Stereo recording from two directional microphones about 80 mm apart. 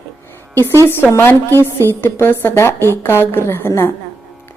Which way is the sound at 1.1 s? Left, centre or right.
Left.